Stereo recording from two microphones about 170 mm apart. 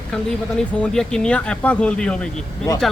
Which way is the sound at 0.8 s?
5° left (ahead or behind).